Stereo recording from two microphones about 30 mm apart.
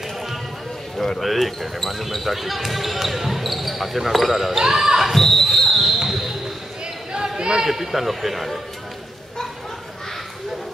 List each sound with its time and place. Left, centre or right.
1.2 s speech: centre
4.8 s basketball bounce: centre
5.1 s a sound: centre
5.9 s basketball bounce: centre
7.3 s speech: right
7.6 s speech: centre